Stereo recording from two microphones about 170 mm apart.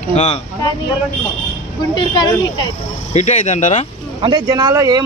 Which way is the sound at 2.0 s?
25° left (ahead or behind).